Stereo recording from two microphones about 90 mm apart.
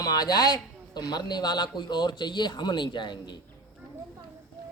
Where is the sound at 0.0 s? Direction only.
45° left (ahead or behind).